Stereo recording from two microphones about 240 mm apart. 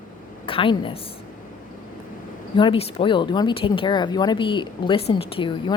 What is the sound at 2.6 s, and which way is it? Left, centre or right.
Speech, left.